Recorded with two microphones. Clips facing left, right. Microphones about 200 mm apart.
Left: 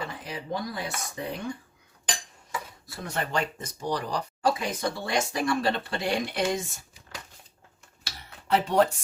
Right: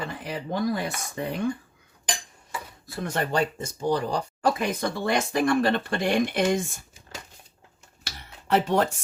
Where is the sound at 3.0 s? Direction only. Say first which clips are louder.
Right 4 dB; 40° right (ahead or behind).